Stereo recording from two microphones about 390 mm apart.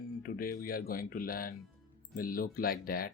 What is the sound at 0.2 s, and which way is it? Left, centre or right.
Speech, left.